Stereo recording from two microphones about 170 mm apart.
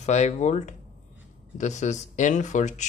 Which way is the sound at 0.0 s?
40° left (ahead or behind).